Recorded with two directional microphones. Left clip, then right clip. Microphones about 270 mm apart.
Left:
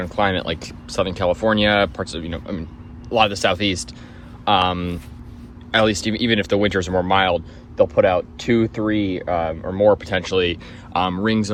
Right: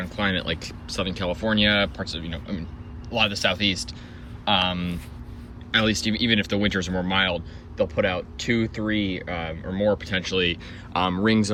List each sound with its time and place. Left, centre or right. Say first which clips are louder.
0.0 s speech: left 6 dB; centre